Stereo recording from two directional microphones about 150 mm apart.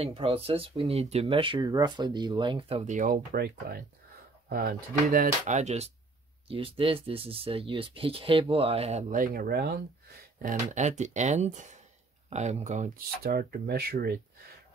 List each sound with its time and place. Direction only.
0.0 s speech: 40° right (ahead or behind)
2.8 s speech: 55° right (ahead or behind)
6.5 s speech: 40° right (ahead or behind)
9.1 s speech: 70° right (ahead or behind); by 9.7 s 85° right
10.4 s speech: 55° right (ahead or behind); by 14.1 s 90° right